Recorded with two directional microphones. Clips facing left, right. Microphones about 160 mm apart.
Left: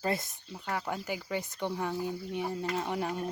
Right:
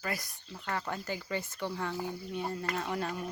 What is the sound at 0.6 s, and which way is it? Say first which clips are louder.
Speech: left 1 dB; 10° left (ahead or behind).